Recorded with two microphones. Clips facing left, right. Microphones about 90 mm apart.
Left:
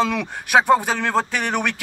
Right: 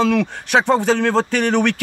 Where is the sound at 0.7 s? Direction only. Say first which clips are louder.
Right 2 dB; 10° left (ahead or behind).